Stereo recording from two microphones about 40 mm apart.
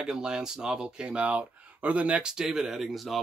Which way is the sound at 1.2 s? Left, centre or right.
Right.